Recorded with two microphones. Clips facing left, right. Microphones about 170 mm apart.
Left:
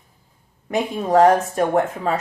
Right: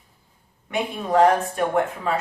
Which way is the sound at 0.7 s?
45° left (ahead or behind).